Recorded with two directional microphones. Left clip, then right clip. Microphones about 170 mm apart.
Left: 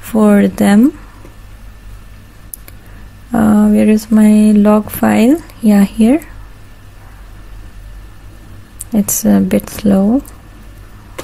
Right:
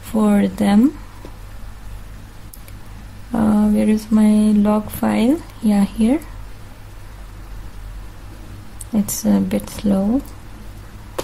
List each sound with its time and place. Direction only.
0.0 s a woman's voice: 30° left (ahead or behind)
3.3 s a sound: 30° left (ahead or behind)
8.9 s a woman's voice: 30° left (ahead or behind)